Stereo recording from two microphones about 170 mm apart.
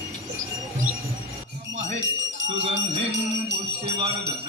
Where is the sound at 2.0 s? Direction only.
90° right.